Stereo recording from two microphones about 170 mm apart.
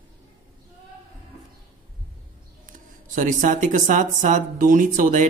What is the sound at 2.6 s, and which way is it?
Speech, 50° right (ahead or behind).